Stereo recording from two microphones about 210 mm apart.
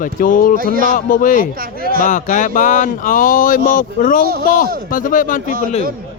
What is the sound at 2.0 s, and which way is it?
Speech, 40° left (ahead or behind).